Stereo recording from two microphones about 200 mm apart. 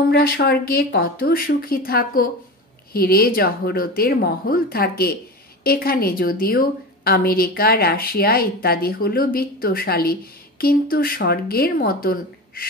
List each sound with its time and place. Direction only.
0.1 s a woman's voice: 50° left (ahead or behind)